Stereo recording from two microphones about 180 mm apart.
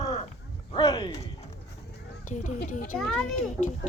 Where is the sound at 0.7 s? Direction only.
25° left (ahead or behind).